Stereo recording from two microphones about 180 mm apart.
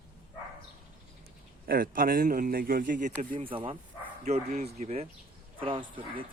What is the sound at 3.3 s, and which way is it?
Speech, 30° right (ahead or behind).